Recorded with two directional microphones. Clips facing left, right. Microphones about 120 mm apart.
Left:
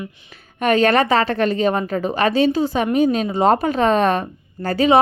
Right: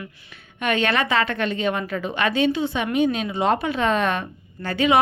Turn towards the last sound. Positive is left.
turn(degrees=35)  # may be behind; listen again after turning